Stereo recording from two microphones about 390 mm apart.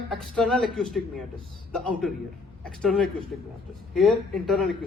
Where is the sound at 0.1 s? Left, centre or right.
Centre.